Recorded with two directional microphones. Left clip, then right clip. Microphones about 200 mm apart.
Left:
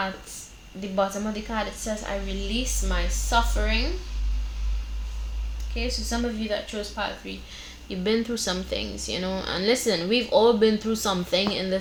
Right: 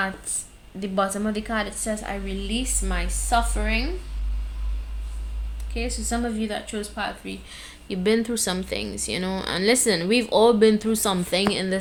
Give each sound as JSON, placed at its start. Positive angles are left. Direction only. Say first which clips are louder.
{"t": 0.8, "sound": "speech", "louder": "right 1 dB", "side_deg": -40}
{"t": 5.7, "sound": "speech", "louder": "right 1 dB", "side_deg": -30}